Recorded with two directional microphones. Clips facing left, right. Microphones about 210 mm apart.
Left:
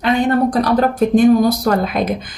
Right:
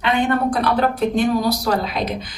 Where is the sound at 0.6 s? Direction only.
45° left (ahead or behind).